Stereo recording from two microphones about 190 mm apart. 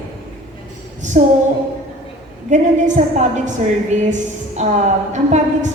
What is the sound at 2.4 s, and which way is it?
A woman's voice, 40° right (ahead or behind).